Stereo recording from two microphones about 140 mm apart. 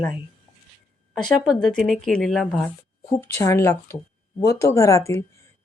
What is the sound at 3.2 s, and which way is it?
Speech, 20° left (ahead or behind).